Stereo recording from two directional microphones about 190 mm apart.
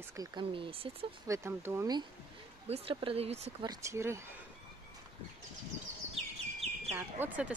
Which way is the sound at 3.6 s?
15° right (ahead or behind).